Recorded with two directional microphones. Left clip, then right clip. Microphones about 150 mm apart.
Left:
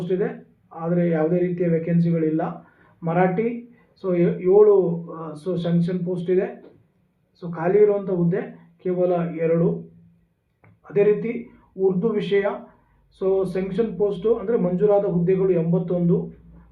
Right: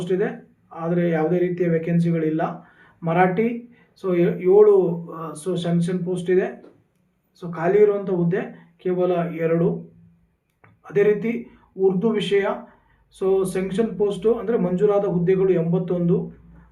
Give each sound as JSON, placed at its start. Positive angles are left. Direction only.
{"t": 0.0, "sound": "speech", "side_deg": -25}
{"t": 10.6, "sound": "a sound", "side_deg": -25}
{"t": 11.8, "sound": "speech", "side_deg": -25}